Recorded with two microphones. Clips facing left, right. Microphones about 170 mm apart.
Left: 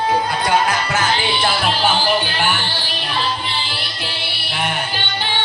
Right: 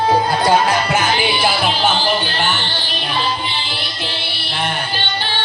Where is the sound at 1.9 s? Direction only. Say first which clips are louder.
Even; 10° left (ahead or behind).